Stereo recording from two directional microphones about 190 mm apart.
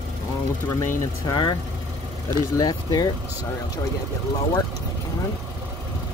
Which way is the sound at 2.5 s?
20° left (ahead or behind).